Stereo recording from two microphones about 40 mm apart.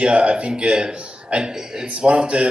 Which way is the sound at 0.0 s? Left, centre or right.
Right.